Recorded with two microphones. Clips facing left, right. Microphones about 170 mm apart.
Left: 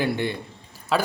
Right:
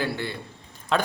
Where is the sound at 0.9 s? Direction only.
5° left (ahead or behind).